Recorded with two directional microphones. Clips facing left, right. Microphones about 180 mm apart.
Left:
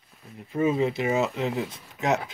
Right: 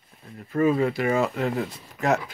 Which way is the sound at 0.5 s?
20° left (ahead or behind).